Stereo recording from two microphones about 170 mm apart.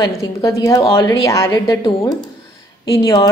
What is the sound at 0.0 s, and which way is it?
A woman's voice, 20° left (ahead or behind).